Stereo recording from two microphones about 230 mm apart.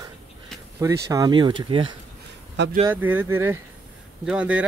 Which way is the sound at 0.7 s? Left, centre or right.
Centre.